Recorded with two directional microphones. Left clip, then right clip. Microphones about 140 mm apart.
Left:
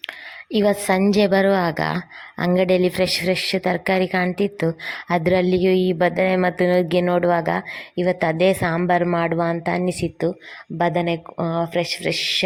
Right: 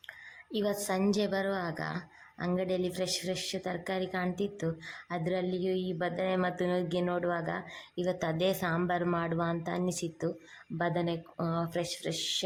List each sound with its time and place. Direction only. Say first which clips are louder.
0.5 s a woman's voice: left 13 dB; 45° left (ahead or behind)